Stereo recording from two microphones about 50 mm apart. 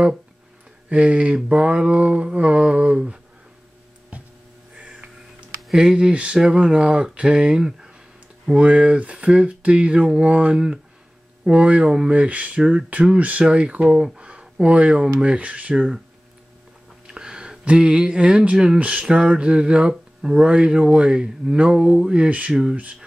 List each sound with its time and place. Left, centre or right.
0.8 s speech: right
4.7 s a sound: right
5.8 s speech: centre
8.5 s speech: right
17.1 s speech: centre